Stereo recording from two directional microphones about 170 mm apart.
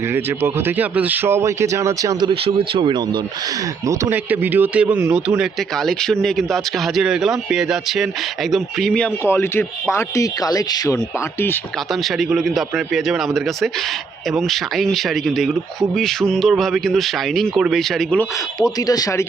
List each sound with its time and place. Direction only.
0.1 s speech: 15° right (ahead or behind)
2.3 s speech: 30° right (ahead or behind)
3.8 s speech: 15° right (ahead or behind); by 11.6 s 15° left (ahead or behind)
11.9 s speech: centre (ahead or behind)
18.2 s speech: 20° left (ahead or behind)